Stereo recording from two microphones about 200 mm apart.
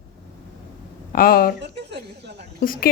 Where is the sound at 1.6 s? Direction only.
60° right (ahead or behind).